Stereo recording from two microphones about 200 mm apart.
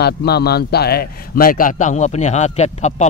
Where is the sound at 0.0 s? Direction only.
55° left (ahead or behind).